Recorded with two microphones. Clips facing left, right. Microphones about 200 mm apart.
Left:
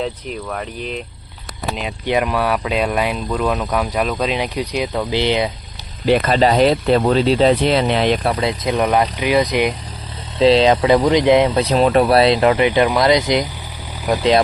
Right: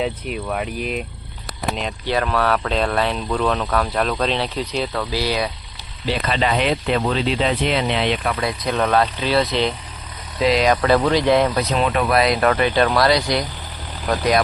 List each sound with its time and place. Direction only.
0.0 s speech: 10° right (ahead or behind)
2.0 s speech: 15° left (ahead or behind)
6.1 s speech: 40° left (ahead or behind)
8.4 s speech: 20° left (ahead or behind)
10.3 s speech: 30° left (ahead or behind)
11.6 s speech: 35° left (ahead or behind); by 14.2 s 15° left (ahead or behind)